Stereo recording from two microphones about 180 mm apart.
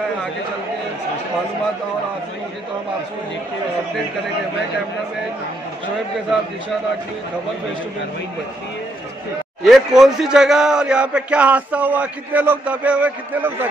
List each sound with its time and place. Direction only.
9.6 s speech: centre (ahead or behind)